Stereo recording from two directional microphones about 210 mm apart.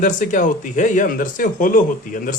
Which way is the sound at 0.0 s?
40° left (ahead or behind).